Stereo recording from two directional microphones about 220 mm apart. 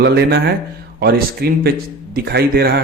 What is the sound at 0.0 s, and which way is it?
A man's voice, 50° right (ahead or behind).